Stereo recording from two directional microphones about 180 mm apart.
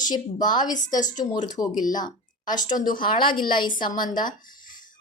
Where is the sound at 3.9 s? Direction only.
45° left (ahead or behind).